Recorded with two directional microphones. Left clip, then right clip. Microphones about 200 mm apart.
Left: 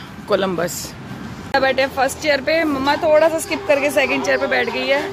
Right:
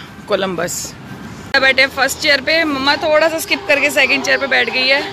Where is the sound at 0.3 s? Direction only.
5° left (ahead or behind).